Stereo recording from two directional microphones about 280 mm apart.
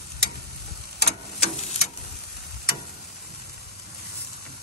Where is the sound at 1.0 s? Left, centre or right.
Left.